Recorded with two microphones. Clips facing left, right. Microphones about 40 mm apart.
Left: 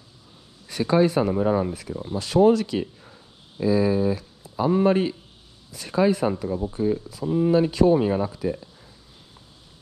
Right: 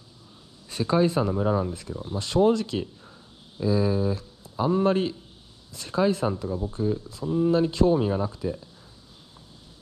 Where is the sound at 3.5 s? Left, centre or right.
Left.